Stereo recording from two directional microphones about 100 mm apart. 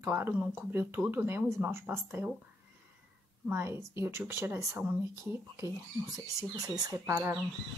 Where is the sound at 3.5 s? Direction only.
25° right (ahead or behind).